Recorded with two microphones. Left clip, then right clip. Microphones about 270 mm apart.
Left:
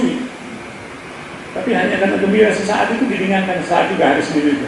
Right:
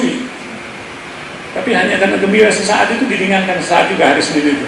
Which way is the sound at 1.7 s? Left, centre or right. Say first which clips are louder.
Right 3 dB; centre.